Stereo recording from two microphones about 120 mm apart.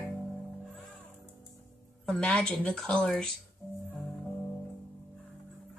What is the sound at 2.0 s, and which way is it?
Speech, 5° left (ahead or behind).